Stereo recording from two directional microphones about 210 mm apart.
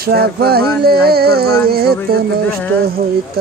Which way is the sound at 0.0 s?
45° right (ahead or behind).